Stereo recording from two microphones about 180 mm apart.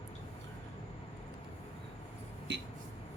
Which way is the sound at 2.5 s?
75° right (ahead or behind).